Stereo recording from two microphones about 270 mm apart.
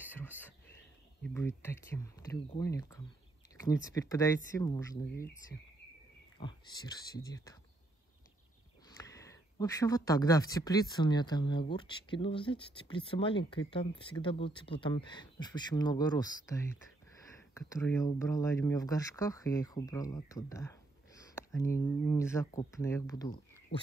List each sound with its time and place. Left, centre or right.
0.1 s a sound: centre
1.2 s speech: centre
6.4 s speech: centre
8.8 s speech: centre